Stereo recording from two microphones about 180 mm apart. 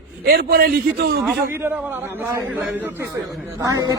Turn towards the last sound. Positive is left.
turn(degrees=-20)  # may be behind; listen again after turning